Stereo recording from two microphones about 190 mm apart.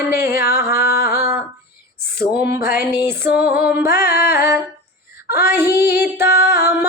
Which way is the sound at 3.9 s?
55° left (ahead or behind).